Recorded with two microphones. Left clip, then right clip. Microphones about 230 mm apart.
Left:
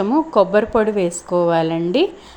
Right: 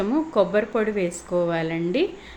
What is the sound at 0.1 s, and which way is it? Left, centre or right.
A woman's voice, centre.